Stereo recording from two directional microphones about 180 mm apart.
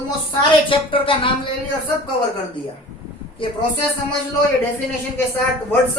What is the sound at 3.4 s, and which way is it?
Speech, 30° left (ahead or behind).